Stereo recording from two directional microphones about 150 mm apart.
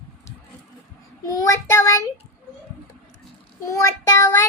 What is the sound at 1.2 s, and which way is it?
Child singing, 20° left (ahead or behind).